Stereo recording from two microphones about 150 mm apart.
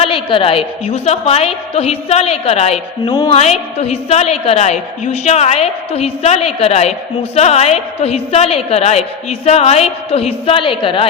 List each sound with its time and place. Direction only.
0.0 s a woman's voice: 35° left (ahead or behind)